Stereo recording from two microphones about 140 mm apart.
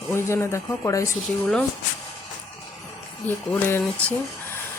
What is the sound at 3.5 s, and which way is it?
Speech, 15° left (ahead or behind).